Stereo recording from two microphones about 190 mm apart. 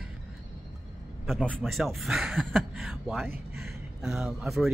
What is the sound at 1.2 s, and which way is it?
Speech, 5° left (ahead or behind).